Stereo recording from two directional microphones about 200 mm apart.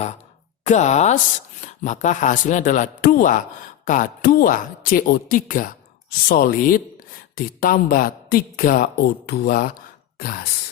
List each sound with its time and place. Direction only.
0.6 s speech: 35° left (ahead or behind)